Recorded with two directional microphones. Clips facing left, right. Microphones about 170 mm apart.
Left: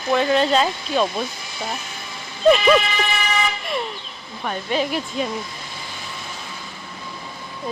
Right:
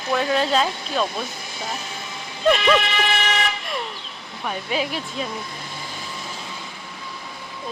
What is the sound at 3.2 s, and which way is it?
Vehicle, 75° right (ahead or behind).